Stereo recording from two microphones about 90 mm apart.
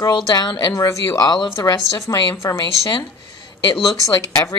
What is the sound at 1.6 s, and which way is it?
A woman's voice, 40° left (ahead or behind).